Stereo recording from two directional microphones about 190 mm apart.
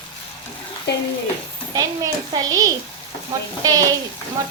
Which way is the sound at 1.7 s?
20° right (ahead or behind).